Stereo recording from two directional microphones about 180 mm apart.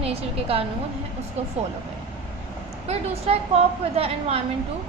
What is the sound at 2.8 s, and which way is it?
A woman's voice, 35° right (ahead or behind).